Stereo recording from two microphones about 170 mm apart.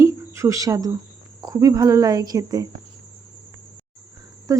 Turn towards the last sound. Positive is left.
turn(degrees=-20)  # may be behind; listen again after turning